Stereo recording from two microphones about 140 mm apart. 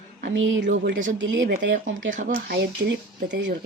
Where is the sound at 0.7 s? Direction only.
65° right (ahead or behind).